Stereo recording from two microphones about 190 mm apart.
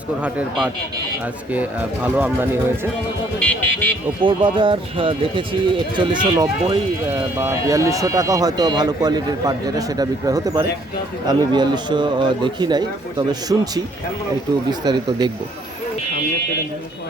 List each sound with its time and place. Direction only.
0.2 s a man's voice: 5° right (ahead or behind)
2.0 s a man's voice: 10° right (ahead or behind)
3.3 s speech: 5° left (ahead or behind)
4.2 s speech: 25° right (ahead or behind)